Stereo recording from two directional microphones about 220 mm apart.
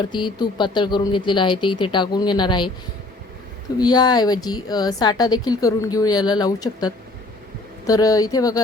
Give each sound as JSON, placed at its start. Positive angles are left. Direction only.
{"t": 0.1, "sound": "speech", "side_deg": 20}
{"t": 3.8, "sound": "speech", "side_deg": 20}